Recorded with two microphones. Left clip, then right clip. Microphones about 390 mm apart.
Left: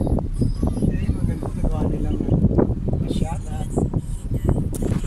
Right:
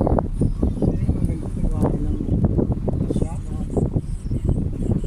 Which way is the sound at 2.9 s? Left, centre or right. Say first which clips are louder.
Right 2 dB; right.